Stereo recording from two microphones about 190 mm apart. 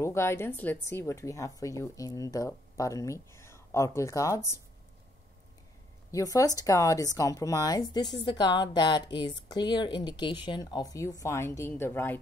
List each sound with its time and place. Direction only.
0.0 s speech: 15° left (ahead or behind)
6.1 s speech: 20° left (ahead or behind)